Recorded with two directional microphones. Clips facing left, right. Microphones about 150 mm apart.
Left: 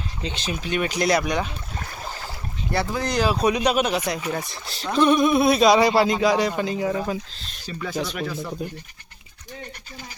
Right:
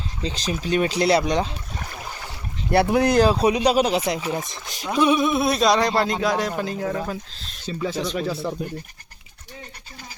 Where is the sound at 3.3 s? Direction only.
25° right (ahead or behind); by 8.7 s centre (ahead or behind).